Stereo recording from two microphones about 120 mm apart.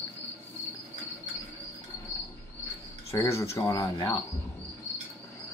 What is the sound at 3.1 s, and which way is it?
Speech, 25° left (ahead or behind).